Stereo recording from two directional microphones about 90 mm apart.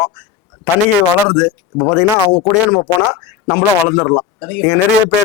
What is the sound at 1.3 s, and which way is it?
Speech, 10° left (ahead or behind).